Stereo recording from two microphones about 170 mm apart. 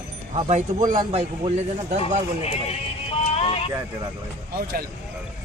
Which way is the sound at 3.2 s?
35° left (ahead or behind).